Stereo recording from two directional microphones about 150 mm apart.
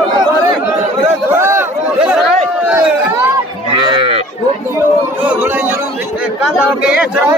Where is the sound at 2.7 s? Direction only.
10° right (ahead or behind).